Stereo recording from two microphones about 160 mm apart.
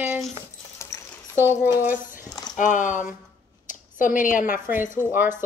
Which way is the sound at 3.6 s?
55° left (ahead or behind).